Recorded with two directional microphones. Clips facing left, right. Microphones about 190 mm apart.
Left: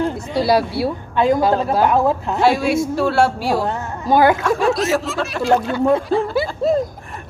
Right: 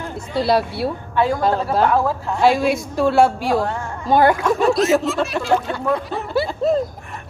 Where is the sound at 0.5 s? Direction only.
5° left (ahead or behind).